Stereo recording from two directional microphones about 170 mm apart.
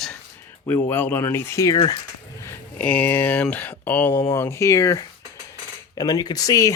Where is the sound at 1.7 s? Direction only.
30° left (ahead or behind).